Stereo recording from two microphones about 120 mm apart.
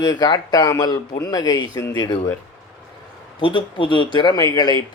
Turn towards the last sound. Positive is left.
turn(degrees=40)  # may be behind; listen again after turning